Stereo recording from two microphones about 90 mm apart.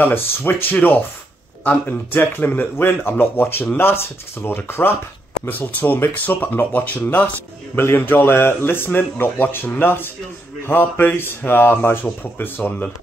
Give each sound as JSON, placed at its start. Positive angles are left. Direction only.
{"t": 0.0, "sound": "a man's voice", "side_deg": 20}